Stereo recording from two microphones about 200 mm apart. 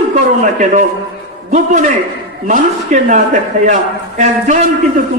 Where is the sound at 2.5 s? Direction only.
35° right (ahead or behind).